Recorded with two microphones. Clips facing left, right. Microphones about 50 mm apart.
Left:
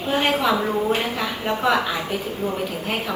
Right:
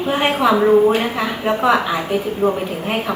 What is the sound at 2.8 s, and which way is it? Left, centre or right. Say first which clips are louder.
Speech: right 4 dB; centre.